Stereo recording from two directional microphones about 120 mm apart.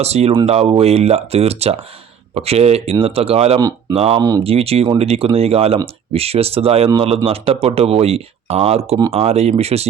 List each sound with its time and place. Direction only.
0.0 s speech: 60° right (ahead or behind)
4.2 s speech: 30° right (ahead or behind)
4.4 s speech: 55° right (ahead or behind)